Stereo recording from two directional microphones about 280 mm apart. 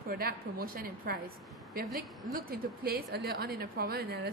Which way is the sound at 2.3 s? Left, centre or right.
Right.